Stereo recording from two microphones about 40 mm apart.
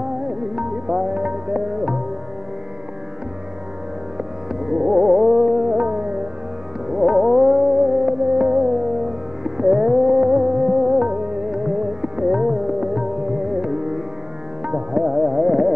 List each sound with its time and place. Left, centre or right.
0.3 s music: centre
4.9 s music: centre
6.9 s music: centre
11.1 s music: right